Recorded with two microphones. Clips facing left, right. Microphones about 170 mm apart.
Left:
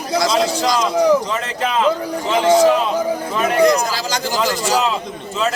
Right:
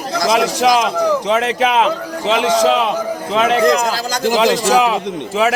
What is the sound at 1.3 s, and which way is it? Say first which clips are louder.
A man's voice: right 6 dB; 75° right (ahead or behind).